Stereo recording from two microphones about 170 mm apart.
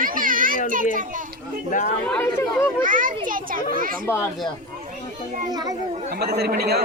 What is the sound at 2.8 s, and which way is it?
A child's voice, 50° right (ahead or behind).